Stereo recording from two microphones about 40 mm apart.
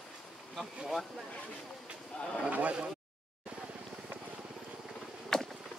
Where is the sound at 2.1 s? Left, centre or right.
Left.